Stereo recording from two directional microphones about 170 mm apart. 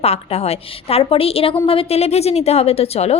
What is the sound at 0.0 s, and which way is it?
A woman's voice, 35° left (ahead or behind).